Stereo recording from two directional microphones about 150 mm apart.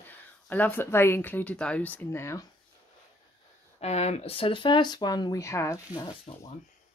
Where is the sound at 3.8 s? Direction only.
45° left (ahead or behind); by 6.1 s 20° left (ahead or behind).